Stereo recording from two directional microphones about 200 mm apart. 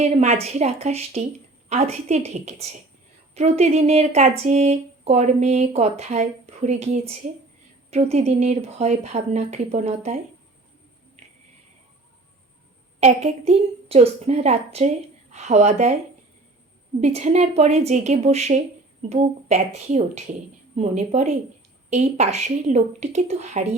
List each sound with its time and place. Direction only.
0.0 s a woman's voice: 35° right (ahead or behind)
8.1 s speech: 30° right (ahead or behind)
11.2 s a sound: 30° right (ahead or behind)
13.0 s speech: 35° right (ahead or behind)
17.0 s speech: 35° right (ahead or behind)